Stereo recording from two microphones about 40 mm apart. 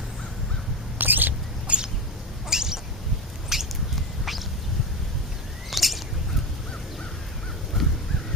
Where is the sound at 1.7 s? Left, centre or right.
Right.